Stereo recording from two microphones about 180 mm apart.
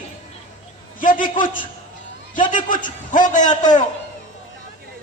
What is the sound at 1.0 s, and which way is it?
Speech, 50° left (ahead or behind).